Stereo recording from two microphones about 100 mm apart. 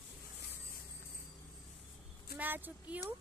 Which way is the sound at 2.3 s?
20° right (ahead or behind).